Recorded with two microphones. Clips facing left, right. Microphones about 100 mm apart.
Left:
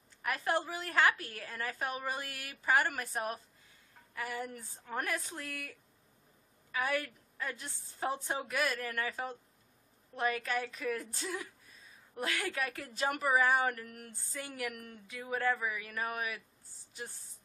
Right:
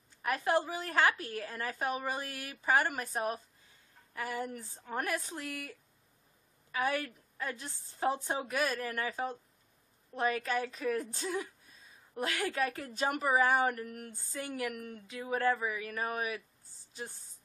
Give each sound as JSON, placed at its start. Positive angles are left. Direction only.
{"t": 0.4, "sound": "a woman's voice", "side_deg": -20}
{"t": 8.5, "sound": "a woman's voice", "side_deg": -35}